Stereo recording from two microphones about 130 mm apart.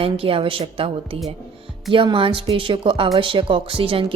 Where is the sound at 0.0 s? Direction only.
45° right (ahead or behind).